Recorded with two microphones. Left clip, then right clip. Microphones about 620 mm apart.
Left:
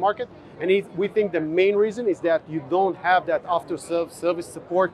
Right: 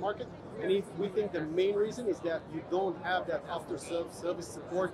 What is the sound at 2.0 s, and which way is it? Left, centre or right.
Speech, left.